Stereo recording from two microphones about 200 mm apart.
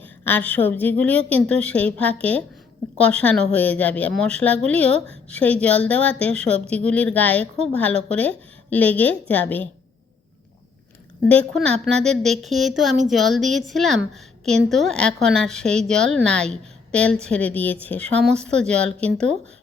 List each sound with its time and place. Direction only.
0.0 s a woman's voice: 10° left (ahead or behind)
11.3 s a woman's voice: 5° left (ahead or behind)